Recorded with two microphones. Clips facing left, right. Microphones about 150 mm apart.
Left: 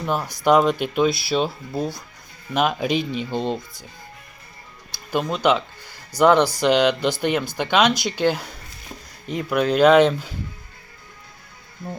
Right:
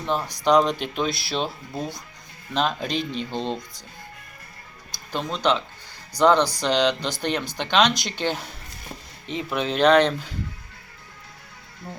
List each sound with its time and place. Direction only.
0.0 s speech: 10° left (ahead or behind)
5.1 s speech: 10° left (ahead or behind)
9.5 s speech: centre (ahead or behind)
11.8 s speech: 15° left (ahead or behind)